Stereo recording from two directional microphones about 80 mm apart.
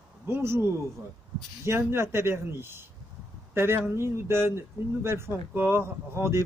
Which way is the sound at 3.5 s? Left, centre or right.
Right.